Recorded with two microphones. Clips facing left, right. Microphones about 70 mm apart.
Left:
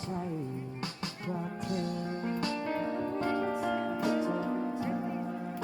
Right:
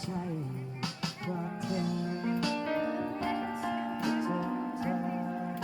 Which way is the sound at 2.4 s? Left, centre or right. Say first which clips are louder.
Right 1 dB; left.